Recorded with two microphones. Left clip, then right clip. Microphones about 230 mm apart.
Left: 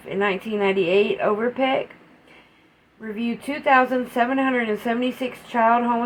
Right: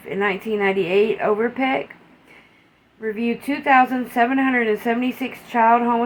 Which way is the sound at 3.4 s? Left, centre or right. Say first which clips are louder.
Right 2 dB; left.